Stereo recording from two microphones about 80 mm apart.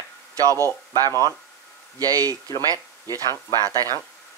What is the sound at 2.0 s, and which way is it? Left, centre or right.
Speech, right.